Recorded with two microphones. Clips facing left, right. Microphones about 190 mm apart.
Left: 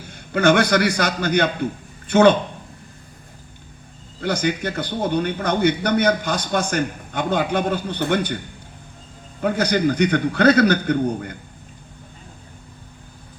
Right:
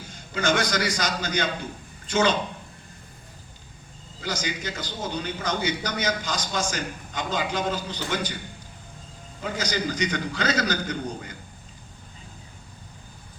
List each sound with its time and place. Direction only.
0.1 s a man's voice: 60° left (ahead or behind)
4.2 s a man's voice: 60° left (ahead or behind)
9.4 s a man's voice: 60° left (ahead or behind)